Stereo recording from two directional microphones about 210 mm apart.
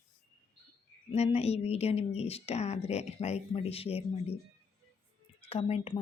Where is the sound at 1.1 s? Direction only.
30° left (ahead or behind).